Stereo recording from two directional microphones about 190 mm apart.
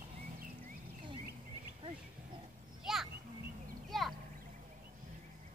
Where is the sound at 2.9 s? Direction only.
Centre (ahead or behind).